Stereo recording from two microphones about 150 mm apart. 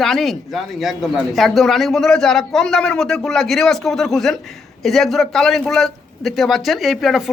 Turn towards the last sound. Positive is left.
turn(degrees=0)  # may be behind; listen again after turning